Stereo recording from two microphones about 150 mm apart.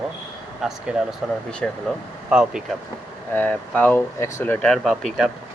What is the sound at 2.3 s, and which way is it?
Speech, 5° right (ahead or behind).